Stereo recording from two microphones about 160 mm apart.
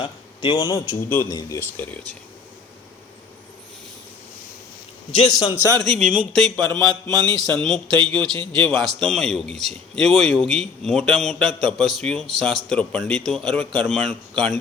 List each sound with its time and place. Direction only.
0.0 s a sound: 35° left (ahead or behind)
1.1 s speech: 20° left (ahead or behind)
5.5 s a man's voice: 20° right (ahead or behind)
5.9 s speech: 50° right (ahead or behind)
6.6 s speech: 5° left (ahead or behind)